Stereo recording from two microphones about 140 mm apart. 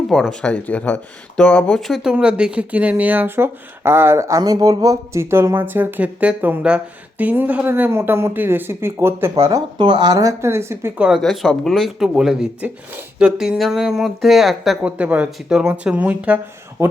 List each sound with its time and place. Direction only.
0.1 s speech: 5° left (ahead or behind); by 9.3 s 15° right (ahead or behind)
9.5 s speech: 30° right (ahead or behind)
10.9 s speech: 10° right (ahead or behind)
11.2 s speech: 5° left (ahead or behind)